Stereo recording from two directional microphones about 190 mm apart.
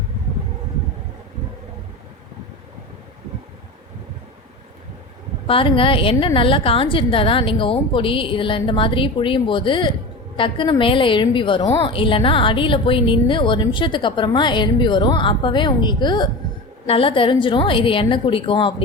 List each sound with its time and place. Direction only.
5.5 s a woman's voice: 30° left (ahead or behind)